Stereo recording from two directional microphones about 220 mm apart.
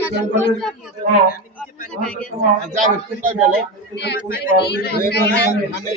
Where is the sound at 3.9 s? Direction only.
50° left (ahead or behind).